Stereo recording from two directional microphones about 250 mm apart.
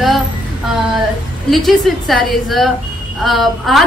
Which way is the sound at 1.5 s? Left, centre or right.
Centre.